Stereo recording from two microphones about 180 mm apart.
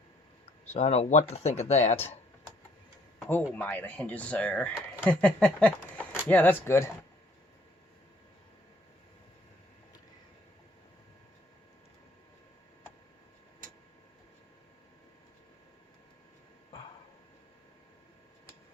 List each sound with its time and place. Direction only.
0.7 s speech: 35° left (ahead or behind)
3.2 s speech: 10° left (ahead or behind)